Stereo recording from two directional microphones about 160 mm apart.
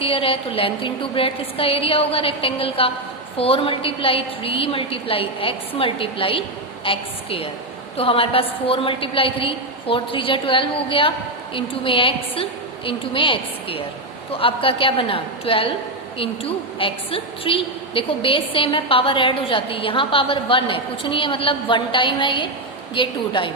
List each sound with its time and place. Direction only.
0.0 s a woman's voice: 35° left (ahead or behind)